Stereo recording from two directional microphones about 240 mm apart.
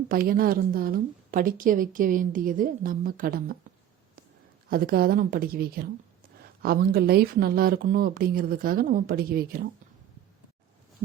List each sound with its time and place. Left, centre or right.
0.1 s a woman's voice: right
4.7 s a woman's voice: right